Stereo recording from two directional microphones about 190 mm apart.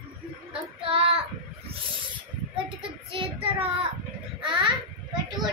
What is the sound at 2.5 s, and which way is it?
Child singing, 25° right (ahead or behind).